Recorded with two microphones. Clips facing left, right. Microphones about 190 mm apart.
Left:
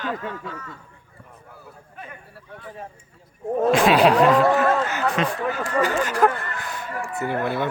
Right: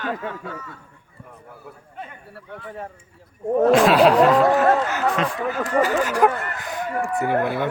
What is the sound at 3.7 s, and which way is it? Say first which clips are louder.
Speech: right 1 dB; centre (ahead or behind).